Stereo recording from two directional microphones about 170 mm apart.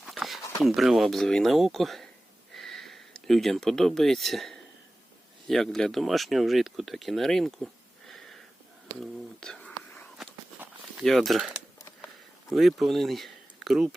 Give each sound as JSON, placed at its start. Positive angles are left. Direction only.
{"t": 0.0, "sound": "a sound", "side_deg": 0}
{"t": 0.6, "sound": "speech", "side_deg": 0}
{"t": 2.5, "sound": "a sound", "side_deg": 0}
{"t": 5.5, "sound": "speech", "side_deg": 0}
{"t": 8.9, "sound": "whispering", "side_deg": 5}
{"t": 11.0, "sound": "speech", "side_deg": 0}